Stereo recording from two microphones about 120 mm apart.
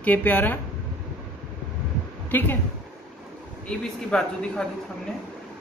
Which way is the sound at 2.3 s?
15° left (ahead or behind).